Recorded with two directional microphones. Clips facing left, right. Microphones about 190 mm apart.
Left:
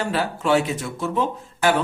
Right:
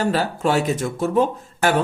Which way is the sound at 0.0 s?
40° right (ahead or behind).